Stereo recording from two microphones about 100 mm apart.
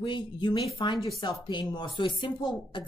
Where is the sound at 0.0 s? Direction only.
50° left (ahead or behind).